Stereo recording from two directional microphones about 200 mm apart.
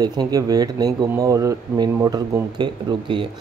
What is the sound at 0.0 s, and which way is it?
Speech, 20° right (ahead or behind).